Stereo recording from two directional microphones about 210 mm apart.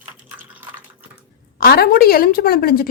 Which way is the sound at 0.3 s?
10° right (ahead or behind).